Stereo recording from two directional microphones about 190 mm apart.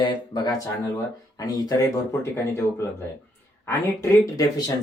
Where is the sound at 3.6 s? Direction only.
15° left (ahead or behind).